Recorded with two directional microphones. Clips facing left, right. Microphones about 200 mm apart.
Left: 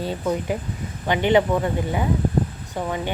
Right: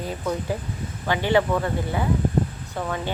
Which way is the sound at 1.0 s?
20° left (ahead or behind).